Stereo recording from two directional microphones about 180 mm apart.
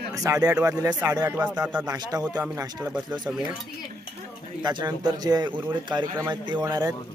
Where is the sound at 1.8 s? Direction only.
20° right (ahead or behind).